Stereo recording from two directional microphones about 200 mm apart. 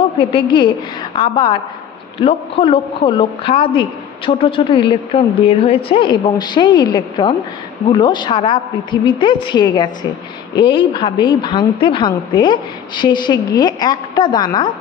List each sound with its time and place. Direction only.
0.2 s a woman's voice: 25° left (ahead or behind)